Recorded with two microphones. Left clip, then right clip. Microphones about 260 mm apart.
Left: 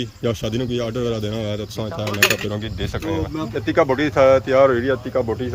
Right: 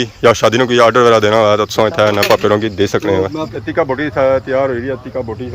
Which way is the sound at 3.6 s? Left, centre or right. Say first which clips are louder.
Right 1 dB; centre.